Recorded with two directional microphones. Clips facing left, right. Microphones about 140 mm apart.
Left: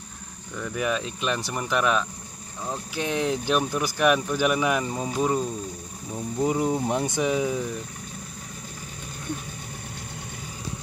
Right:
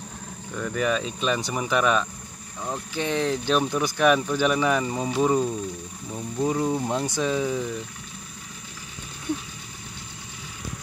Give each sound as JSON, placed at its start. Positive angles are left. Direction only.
{"t": 0.6, "sound": "speech", "side_deg": 5}
{"t": 6.4, "sound": "speech", "side_deg": 15}